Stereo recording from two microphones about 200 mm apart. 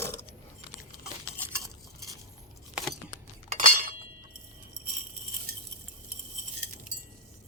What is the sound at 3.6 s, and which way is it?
Chink, 40° right (ahead or behind).